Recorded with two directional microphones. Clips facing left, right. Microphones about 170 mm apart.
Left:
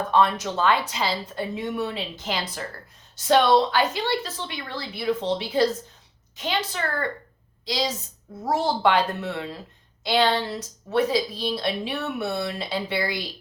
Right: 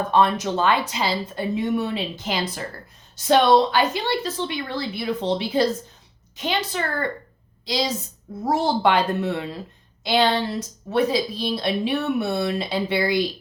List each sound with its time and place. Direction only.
0.1 s a woman's voice: 15° right (ahead or behind)